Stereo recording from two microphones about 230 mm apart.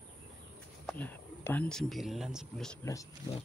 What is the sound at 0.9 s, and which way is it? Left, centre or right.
Speech, centre.